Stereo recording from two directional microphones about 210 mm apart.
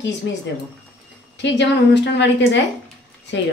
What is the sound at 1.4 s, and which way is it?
Speech, 55° left (ahead or behind).